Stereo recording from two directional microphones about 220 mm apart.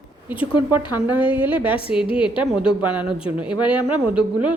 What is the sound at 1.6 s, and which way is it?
Speech, 25° left (ahead or behind).